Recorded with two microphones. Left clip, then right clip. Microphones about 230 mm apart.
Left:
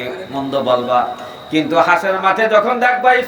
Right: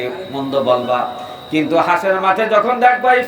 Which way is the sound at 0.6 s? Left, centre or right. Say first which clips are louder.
Right 2 dB; left.